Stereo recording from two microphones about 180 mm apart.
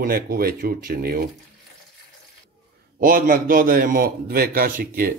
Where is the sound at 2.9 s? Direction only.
50° right (ahead or behind).